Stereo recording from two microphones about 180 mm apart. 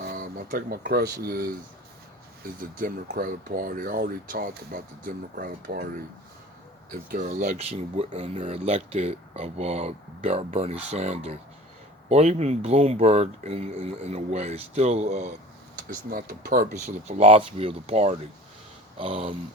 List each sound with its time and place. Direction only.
0.0 s speech: 55° right (ahead or behind)
2.6 s speech: 50° right (ahead or behind)
6.9 s speech: 50° right (ahead or behind)
15.9 s speech: 50° right (ahead or behind)
16.8 s speech: 35° right (ahead or behind)